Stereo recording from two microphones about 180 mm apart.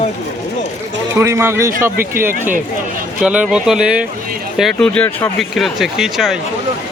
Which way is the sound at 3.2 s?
5° right (ahead or behind).